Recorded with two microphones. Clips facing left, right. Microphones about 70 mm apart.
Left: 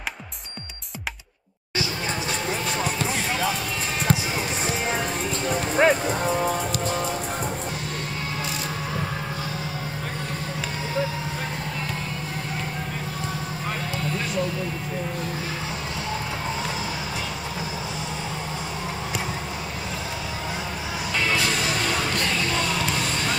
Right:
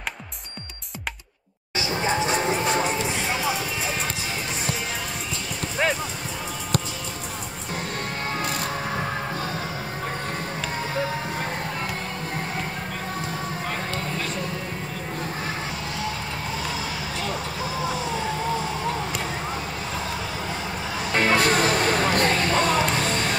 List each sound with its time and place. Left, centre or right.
1.8 s a sound: right
5.8 s music: left
21.1 s music: right